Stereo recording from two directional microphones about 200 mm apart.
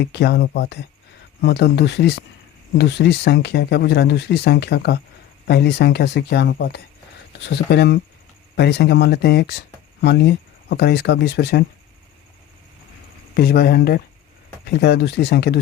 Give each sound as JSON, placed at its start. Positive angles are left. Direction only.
{"t": 0.0, "sound": "speech", "side_deg": 55}
{"t": 13.3, "sound": "speech", "side_deg": 50}